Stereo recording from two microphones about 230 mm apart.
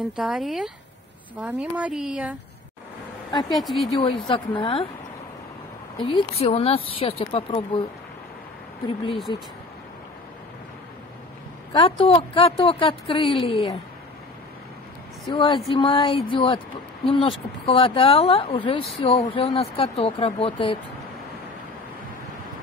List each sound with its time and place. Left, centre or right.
0.1 s speech: centre
3.3 s speech: centre
3.6 s speech: centre
3.9 s speech: left
5.9 s speech: left
8.8 s speech: left
11.8 s speech: left
15.2 s speech: left